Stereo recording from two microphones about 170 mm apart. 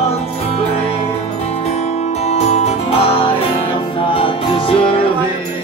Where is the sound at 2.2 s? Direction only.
40° left (ahead or behind).